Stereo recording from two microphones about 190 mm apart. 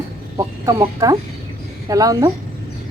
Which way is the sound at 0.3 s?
15° right (ahead or behind).